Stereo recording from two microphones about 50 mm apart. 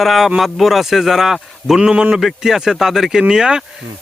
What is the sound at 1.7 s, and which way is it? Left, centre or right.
Speech, centre.